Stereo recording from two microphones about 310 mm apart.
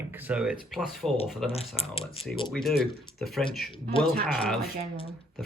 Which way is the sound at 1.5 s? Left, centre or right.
Centre.